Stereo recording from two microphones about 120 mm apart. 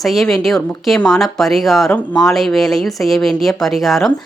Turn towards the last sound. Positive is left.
turn(degrees=0)  # may be behind; listen again after turning